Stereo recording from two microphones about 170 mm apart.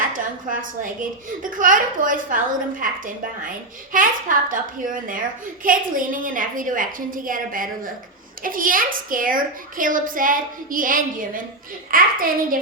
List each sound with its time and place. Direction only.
0.1 s a woman's voice: 50° right (ahead or behind)
3.9 s a child's voice: 50° right (ahead or behind)